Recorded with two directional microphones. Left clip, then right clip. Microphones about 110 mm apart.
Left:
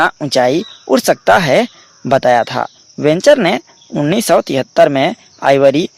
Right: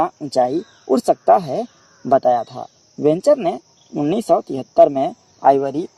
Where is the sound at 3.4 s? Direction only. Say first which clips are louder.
Left 7 dB; 20° left (ahead or behind).